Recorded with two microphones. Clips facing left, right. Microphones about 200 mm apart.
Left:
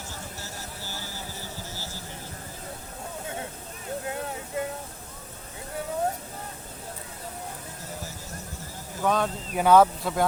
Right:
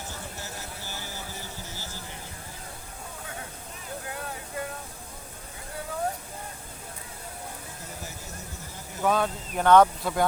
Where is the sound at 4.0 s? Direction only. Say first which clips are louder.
Left 4 dB; 25° left (ahead or behind).